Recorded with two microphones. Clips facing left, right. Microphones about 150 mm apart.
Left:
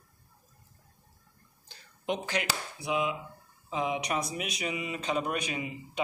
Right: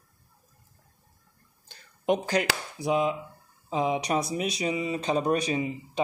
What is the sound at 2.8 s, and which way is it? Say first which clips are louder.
Speech: right 5 dB; 35° right (ahead or behind).